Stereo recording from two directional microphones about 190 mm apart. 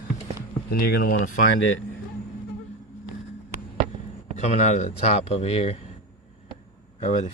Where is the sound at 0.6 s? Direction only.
55° left (ahead or behind).